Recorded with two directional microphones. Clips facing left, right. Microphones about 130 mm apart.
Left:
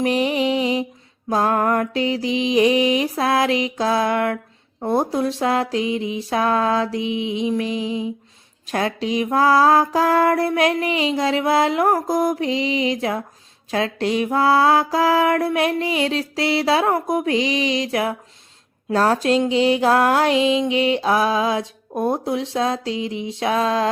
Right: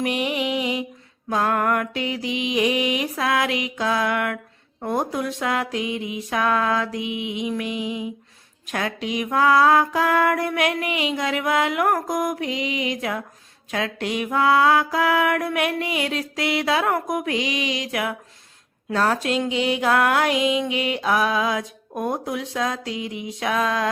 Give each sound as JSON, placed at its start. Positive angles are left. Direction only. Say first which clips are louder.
{"t": 0.0, "sound": "music", "louder": "left 5 dB", "side_deg": 35}